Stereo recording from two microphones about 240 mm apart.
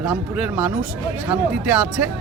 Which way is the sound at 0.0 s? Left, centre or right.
Centre.